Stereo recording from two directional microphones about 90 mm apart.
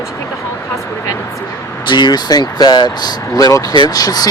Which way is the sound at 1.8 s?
55° left (ahead or behind).